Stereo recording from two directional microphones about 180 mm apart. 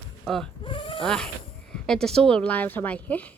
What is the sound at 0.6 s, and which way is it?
Sheep, 30° left (ahead or behind).